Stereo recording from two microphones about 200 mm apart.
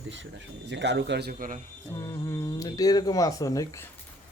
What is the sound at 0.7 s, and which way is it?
Speech, 60° right (ahead or behind).